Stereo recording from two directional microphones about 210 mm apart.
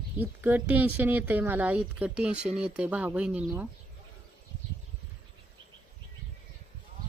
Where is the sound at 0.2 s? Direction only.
10° right (ahead or behind).